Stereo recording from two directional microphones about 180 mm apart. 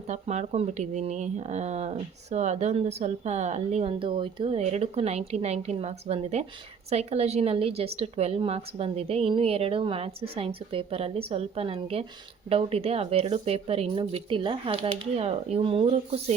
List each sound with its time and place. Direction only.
0.1 s speech: 40° right (ahead or behind)